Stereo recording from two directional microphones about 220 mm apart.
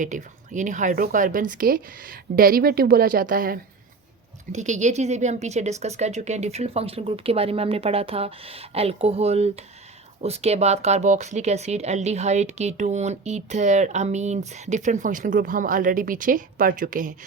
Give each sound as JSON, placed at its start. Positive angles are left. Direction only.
{"t": 0.0, "sound": "a woman's voice", "side_deg": -35}